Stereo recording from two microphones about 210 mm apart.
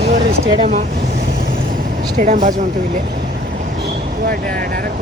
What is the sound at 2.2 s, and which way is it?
Speech, 40° right (ahead or behind).